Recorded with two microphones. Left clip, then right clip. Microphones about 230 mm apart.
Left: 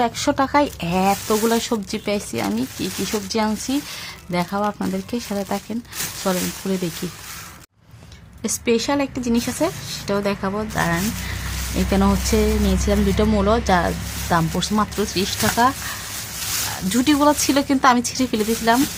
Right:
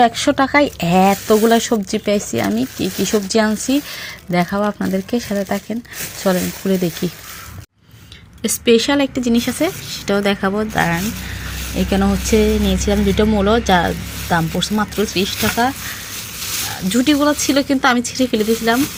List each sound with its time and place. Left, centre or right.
0.0 s speech: centre
8.4 s speech: centre
16.9 s speech: centre